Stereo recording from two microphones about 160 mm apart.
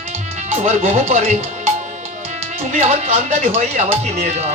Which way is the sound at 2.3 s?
45° right (ahead or behind).